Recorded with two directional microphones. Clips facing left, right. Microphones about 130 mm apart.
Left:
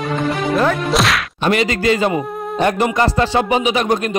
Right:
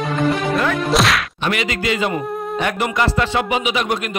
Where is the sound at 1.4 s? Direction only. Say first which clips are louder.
Left 8 dB; 35° left (ahead or behind).